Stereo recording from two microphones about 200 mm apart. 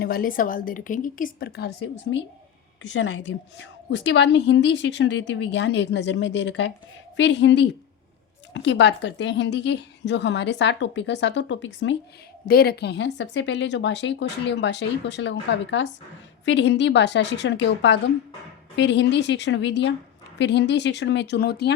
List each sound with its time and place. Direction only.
0.0 s a woman's voice: 50° left (ahead or behind)
2.9 s a woman's voice: 65° left (ahead or behind)
12.5 s a woman's voice: 50° left (ahead or behind)